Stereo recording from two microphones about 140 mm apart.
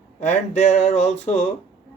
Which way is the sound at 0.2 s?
55° left (ahead or behind).